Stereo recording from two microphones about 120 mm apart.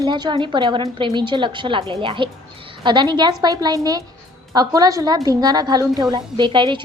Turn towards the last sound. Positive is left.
turn(degrees=-40)  # may be behind; listen again after turning